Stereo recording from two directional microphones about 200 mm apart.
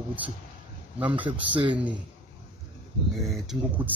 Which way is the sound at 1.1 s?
25° right (ahead or behind).